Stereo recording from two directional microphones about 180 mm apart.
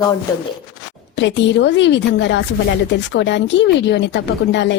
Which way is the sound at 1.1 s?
85° left.